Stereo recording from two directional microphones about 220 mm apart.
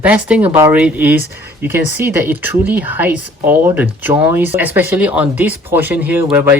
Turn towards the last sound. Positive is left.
turn(degrees=-10)  # may be behind; listen again after turning